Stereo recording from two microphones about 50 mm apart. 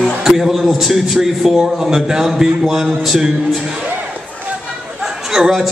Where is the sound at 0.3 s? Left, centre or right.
Centre.